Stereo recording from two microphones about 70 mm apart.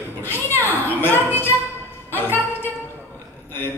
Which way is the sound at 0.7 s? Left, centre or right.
Left.